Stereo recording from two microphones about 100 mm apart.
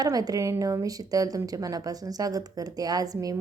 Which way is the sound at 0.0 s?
40° right (ahead or behind).